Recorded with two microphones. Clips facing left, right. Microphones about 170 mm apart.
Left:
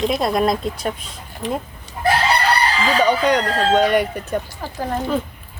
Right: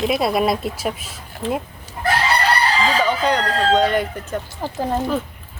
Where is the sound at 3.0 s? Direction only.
15° left (ahead or behind).